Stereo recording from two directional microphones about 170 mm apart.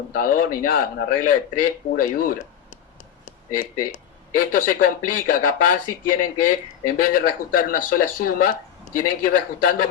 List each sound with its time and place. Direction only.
0.1 s speech: 55° left (ahead or behind)
3.2 s a sound: 55° left (ahead or behind)
4.4 s speech: 55° left (ahead or behind)